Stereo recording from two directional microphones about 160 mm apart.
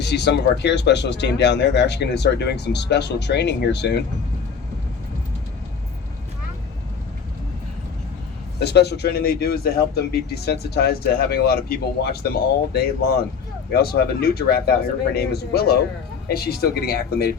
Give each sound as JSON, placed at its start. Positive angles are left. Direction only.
{"t": 0.0, "sound": "speech", "side_deg": 90}
{"t": 8.5, "sound": "speech", "side_deg": 90}